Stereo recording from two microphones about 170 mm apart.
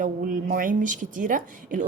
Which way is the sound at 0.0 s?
50° right (ahead or behind).